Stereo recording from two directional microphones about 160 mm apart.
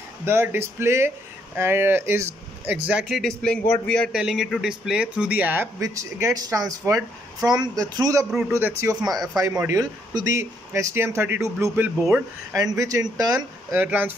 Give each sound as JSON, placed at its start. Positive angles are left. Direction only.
{"t": 0.2, "sound": "speech", "side_deg": -15}
{"t": 2.9, "sound": "a man's voice", "side_deg": -5}
{"t": 12.7, "sound": "speech", "side_deg": -20}